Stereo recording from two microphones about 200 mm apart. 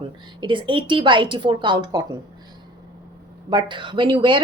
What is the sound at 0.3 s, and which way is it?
Speech, 25° right (ahead or behind).